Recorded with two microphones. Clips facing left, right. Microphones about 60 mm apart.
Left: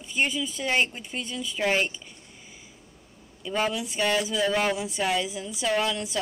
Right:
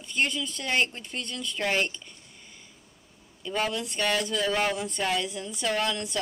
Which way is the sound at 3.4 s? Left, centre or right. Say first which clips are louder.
Left 2 dB; centre.